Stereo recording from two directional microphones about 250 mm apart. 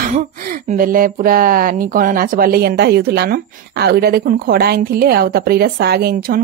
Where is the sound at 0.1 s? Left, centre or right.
Right.